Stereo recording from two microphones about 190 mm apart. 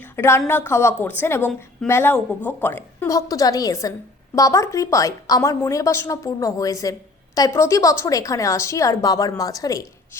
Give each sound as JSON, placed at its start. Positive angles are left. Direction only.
{"t": 0.0, "sound": "a woman's voice", "side_deg": 15}